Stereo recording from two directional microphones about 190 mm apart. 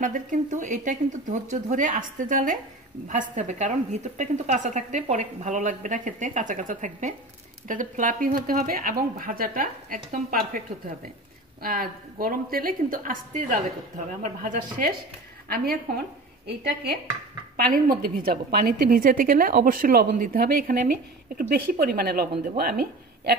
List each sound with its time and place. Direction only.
0.0 s a woman's voice: 45° right (ahead or behind)
11.6 s a woman's voice: 50° right (ahead or behind)
17.8 s a woman's voice: 50° right (ahead or behind)